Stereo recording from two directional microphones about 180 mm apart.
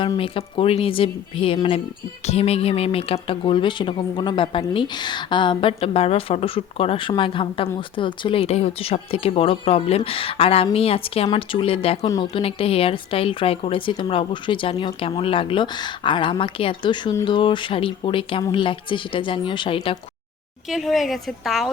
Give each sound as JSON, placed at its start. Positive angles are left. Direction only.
{"t": 0.0, "sound": "a woman's voice", "side_deg": 30}
{"t": 20.7, "sound": "a woman's voice", "side_deg": 0}